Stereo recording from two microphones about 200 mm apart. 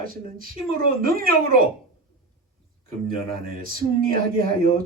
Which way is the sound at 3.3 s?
45° right (ahead or behind).